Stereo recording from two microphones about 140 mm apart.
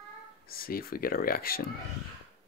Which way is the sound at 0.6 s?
90° left.